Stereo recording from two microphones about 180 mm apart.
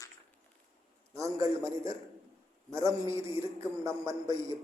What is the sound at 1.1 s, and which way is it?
A man's voice, 15° right (ahead or behind).